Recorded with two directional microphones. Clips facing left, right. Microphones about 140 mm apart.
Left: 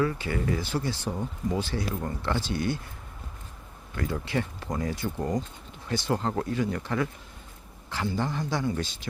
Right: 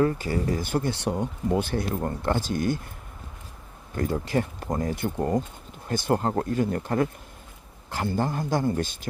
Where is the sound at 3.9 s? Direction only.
40° right (ahead or behind).